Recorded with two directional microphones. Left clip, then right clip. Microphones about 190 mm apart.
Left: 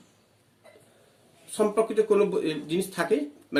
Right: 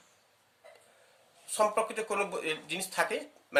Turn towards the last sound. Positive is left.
turn(degrees=-35)  # may be behind; listen again after turning